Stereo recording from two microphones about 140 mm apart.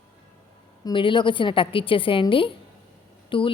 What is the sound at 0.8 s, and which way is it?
A woman's voice, 35° left (ahead or behind).